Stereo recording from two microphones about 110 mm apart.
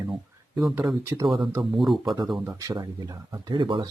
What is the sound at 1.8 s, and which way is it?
Speech, centre (ahead or behind).